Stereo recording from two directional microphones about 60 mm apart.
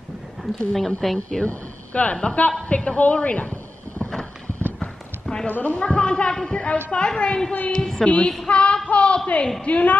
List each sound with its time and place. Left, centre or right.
0.4 s a woman's voice: centre
1.4 s a man's voice: left
4.7 s clip-clop: centre
5.5 s a woman's voice: left